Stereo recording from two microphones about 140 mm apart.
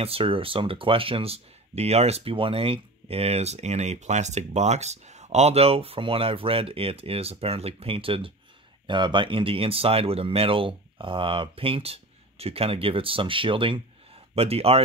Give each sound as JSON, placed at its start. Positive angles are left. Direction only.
{"t": 0.0, "sound": "speech", "side_deg": -40}